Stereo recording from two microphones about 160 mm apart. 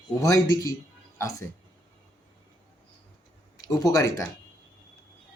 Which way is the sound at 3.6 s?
25° left (ahead or behind).